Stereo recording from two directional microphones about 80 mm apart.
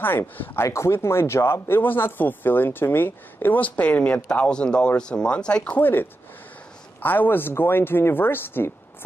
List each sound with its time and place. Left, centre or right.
0.0 s speech: left